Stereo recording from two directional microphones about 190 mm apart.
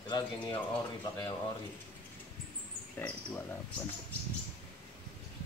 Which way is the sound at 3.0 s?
10° left (ahead or behind).